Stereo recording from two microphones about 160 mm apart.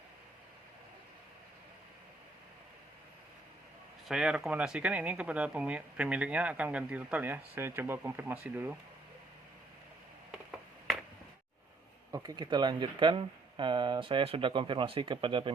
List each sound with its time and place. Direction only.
4.1 s speech: 5° right (ahead or behind)
12.1 s speech: 20° right (ahead or behind)